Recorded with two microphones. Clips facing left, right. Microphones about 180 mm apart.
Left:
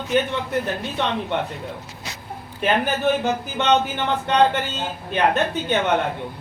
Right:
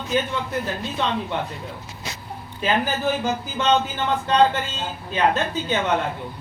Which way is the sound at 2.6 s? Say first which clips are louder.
Left 2 dB; 60° left (ahead or behind).